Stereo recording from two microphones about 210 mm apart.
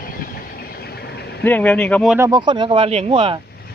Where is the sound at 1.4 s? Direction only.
10° left (ahead or behind).